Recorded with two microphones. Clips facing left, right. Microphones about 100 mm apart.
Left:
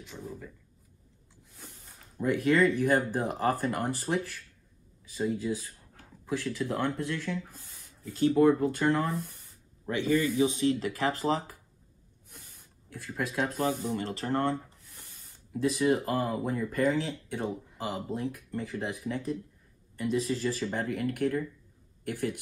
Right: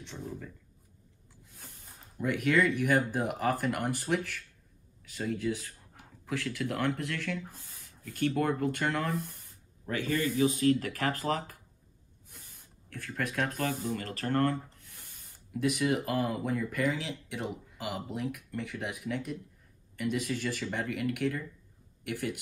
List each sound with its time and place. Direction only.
0.0 s speech: 5° left (ahead or behind)
2.1 s speech: 30° left (ahead or behind)
5.4 s speech: 20° left (ahead or behind)
6.2 s speech: 30° left (ahead or behind)
13.1 s speech: 20° left (ahead or behind); by 21.0 s 35° left (ahead or behind)
22.1 s a man's voice: 70° right (ahead or behind)